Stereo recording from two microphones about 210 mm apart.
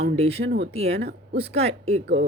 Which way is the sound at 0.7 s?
30° right (ahead or behind).